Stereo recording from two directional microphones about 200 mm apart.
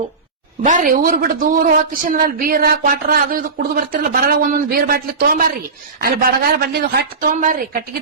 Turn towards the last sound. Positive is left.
turn(degrees=-45)  # may be behind; listen again after turning